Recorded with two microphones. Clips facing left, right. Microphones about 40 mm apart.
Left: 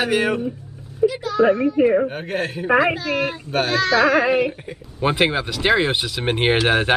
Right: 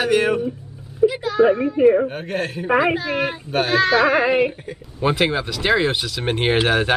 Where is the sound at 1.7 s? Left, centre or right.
Centre.